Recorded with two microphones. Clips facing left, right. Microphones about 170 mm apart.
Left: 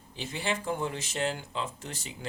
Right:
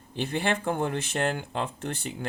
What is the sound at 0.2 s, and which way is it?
Speech, 60° right (ahead or behind).